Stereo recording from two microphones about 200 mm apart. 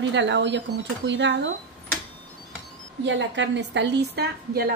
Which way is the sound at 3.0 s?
65° right (ahead or behind).